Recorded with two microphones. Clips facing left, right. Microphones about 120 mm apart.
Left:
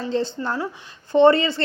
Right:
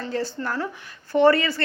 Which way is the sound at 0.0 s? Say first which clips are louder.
Left 3 dB; 25° left (ahead or behind).